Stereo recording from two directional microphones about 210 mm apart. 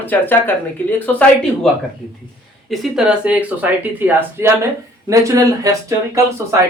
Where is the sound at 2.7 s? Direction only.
Centre (ahead or behind).